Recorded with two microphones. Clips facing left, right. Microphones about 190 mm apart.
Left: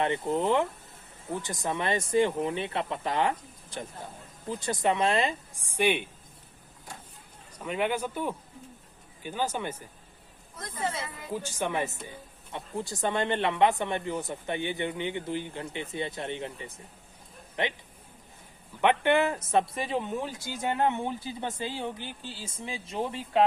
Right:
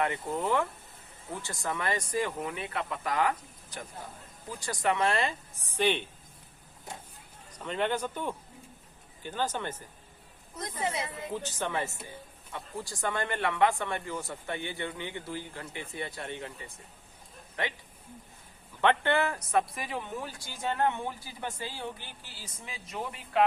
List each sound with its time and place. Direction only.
0.0 s speech: 25° left (ahead or behind)
7.5 s speech: 10° left (ahead or behind)
10.6 s a woman's voice: 15° right (ahead or behind)
11.4 s speech: 15° left (ahead or behind)
18.8 s speech: 15° left (ahead or behind)